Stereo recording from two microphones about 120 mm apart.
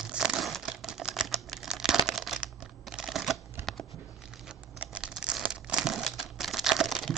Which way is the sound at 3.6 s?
20° right (ahead or behind).